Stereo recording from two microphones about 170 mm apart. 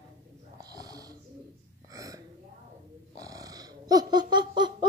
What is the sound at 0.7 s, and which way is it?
Snoring, 20° right (ahead or behind).